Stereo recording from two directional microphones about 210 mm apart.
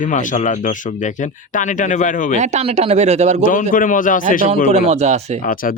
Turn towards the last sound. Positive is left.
turn(degrees=40)  # may be behind; listen again after turning